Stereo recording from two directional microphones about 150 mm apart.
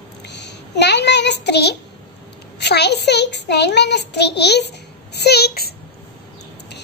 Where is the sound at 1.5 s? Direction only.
90° left.